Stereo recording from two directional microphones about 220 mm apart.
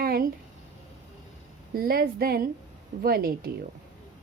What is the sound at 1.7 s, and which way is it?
A woman's voice, 40° right (ahead or behind).